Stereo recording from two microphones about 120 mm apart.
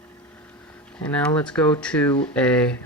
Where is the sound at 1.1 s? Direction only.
10° left (ahead or behind).